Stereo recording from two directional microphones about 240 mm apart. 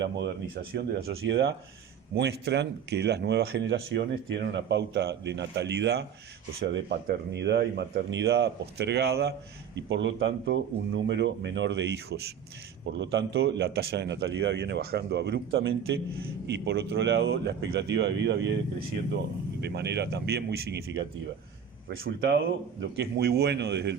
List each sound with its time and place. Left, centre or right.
0.0 s speech: right
19.6 s speech: right